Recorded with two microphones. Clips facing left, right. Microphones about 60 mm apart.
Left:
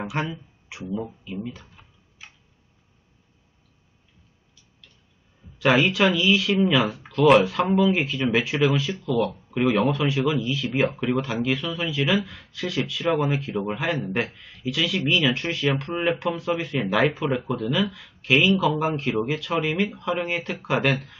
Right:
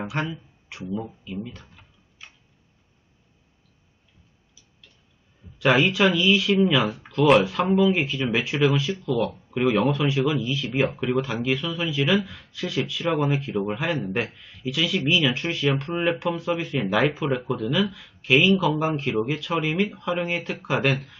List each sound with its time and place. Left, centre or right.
0.0 s a sound: centre
0.9 s speech: centre
5.5 s speech: centre